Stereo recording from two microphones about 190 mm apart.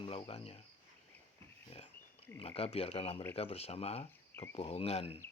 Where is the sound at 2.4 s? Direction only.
30° left (ahead or behind).